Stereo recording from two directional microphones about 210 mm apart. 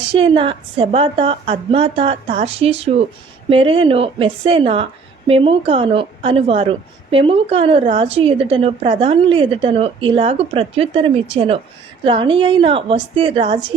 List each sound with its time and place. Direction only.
0.0 s a woman's voice: 25° right (ahead or behind)